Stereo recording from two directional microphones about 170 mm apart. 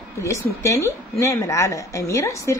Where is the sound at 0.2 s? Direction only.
20° left (ahead or behind).